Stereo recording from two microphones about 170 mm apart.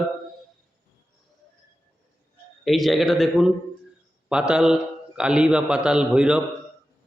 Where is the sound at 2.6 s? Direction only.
Centre (ahead or behind).